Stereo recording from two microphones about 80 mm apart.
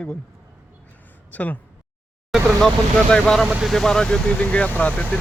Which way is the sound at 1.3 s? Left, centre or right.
Centre.